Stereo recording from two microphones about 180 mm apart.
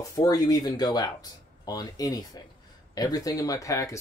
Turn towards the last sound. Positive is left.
turn(degrees=20)  # may be behind; listen again after turning